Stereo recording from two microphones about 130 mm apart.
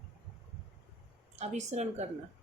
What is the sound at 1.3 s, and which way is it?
Speech, 60° right (ahead or behind).